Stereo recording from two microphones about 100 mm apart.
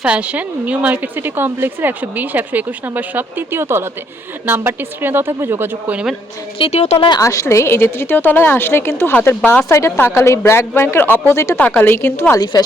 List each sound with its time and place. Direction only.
0.0 s a woman's voice: 10° right (ahead or behind)
6.6 s a woman's voice: 90° left
7.2 s a woman's voice: 30° left (ahead or behind)
12.4 s speech: 45° left (ahead or behind)